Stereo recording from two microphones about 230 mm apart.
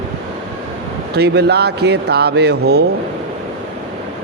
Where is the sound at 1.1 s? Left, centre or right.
Right.